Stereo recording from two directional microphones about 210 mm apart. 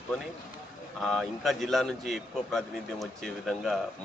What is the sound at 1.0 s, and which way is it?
A man's voice, centre (ahead or behind).